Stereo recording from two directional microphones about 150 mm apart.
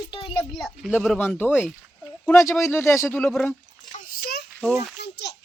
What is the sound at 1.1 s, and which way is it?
Speech, 10° left (ahead or behind).